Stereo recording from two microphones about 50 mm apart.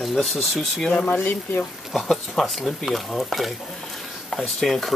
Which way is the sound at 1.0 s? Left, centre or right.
Left.